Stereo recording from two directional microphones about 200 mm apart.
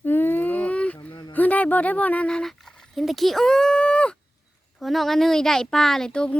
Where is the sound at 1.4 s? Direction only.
10° left (ahead or behind).